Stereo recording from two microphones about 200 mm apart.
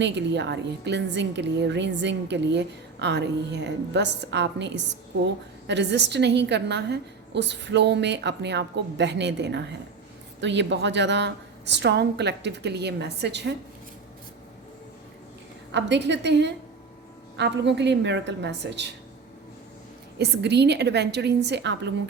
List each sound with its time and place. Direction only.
0.0 s a woman's voice: 60° right (ahead or behind)
15.7 s a woman's voice: 60° right (ahead or behind)
20.1 s a woman's voice: 55° right (ahead or behind)